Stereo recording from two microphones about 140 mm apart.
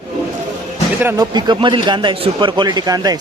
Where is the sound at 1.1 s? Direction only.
30° right (ahead or behind).